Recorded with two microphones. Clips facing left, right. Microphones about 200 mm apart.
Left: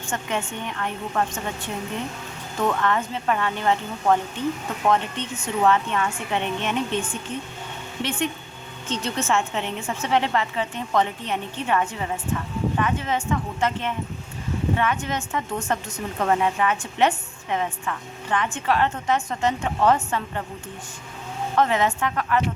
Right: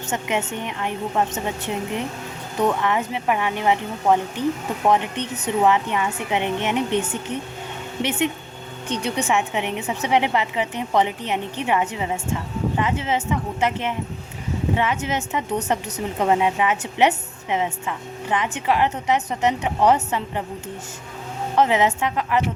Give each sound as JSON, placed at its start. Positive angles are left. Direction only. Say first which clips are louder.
{"t": 0.1, "sound": "a woman's voice", "louder": "right 3 dB", "side_deg": -20}
{"t": 21.5, "sound": "speech", "louder": "right 3 dB", "side_deg": -20}